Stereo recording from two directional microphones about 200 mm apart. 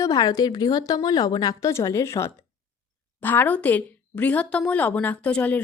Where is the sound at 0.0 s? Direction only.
20° left (ahead or behind).